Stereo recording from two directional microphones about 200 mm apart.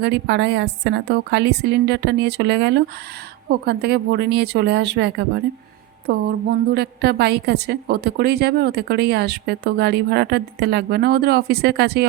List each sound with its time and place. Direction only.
0.0 s a woman's voice: 60° right (ahead or behind)